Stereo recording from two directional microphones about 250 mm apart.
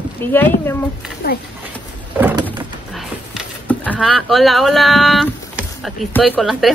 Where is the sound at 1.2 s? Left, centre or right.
Left.